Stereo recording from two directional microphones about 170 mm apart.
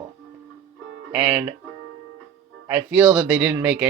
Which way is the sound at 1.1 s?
10° right (ahead or behind).